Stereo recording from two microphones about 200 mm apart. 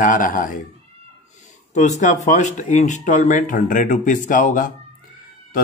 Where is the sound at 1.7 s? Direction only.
35° left (ahead or behind).